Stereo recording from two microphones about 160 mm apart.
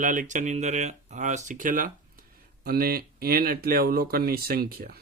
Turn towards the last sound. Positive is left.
turn(degrees=-70)  # may be behind; listen again after turning